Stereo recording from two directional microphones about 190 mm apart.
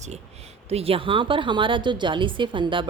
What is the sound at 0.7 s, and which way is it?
A woman's voice, 30° right (ahead or behind).